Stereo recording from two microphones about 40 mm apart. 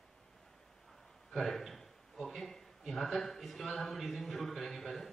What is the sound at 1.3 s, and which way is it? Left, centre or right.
A man's voice, centre.